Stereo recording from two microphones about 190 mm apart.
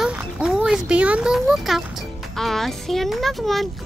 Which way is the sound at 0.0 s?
5° right (ahead or behind).